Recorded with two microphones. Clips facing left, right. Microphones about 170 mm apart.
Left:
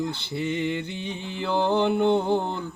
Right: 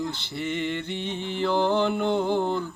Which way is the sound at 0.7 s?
15° left (ahead or behind).